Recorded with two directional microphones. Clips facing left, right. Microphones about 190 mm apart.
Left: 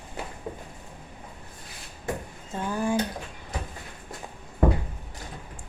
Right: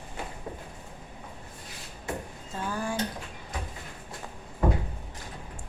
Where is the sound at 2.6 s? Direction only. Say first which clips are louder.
Left 5 dB; 20° left (ahead or behind).